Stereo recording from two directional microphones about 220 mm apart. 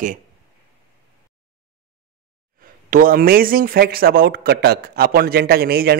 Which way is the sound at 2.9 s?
40° right (ahead or behind).